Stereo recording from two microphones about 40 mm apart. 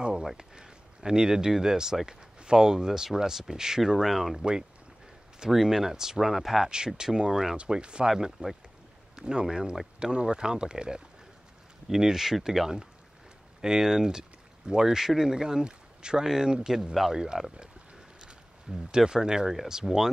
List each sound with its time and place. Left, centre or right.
0.0 s a sound: centre
0.4 s speech: centre
5.5 s speech: centre
7.0 s speech: centre
8.1 s speech: centre
9.1 s speech: right
18.7 s speech: centre